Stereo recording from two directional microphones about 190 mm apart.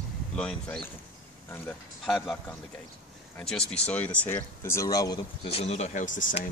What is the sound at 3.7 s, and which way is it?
Speech, 5° left (ahead or behind).